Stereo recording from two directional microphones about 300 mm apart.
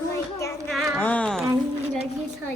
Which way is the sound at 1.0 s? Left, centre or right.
Centre.